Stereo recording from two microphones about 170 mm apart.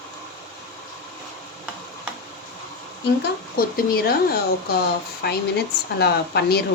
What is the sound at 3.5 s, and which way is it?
Speech, 60° left (ahead or behind).